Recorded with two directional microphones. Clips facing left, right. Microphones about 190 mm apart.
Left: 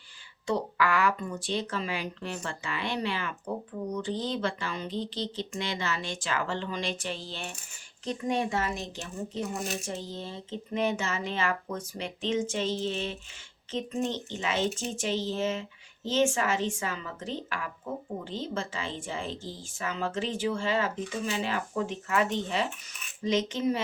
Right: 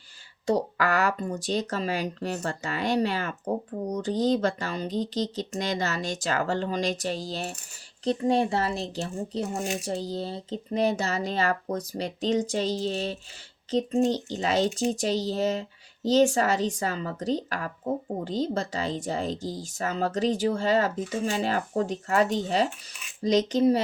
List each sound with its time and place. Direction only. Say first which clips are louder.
0.4 s speech: right 3 dB; 40° right (ahead or behind)